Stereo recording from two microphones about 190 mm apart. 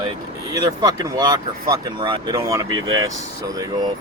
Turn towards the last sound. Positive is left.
turn(degrees=-20)  # may be behind; listen again after turning